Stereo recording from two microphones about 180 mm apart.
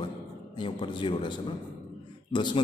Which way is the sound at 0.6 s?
25° left (ahead or behind).